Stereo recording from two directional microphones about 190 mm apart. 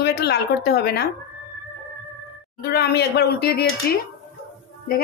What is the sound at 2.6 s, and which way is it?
Speech, 55° left (ahead or behind).